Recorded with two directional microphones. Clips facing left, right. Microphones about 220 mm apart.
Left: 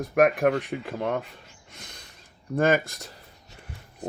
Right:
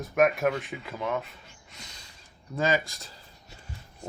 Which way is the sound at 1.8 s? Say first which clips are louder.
Left 3 dB; 55° left (ahead or behind).